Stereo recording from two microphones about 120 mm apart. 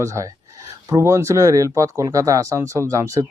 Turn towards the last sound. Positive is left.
turn(degrees=-25)  # may be behind; listen again after turning